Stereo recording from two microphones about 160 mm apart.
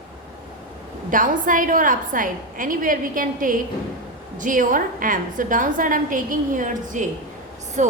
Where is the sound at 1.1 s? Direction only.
55° right (ahead or behind).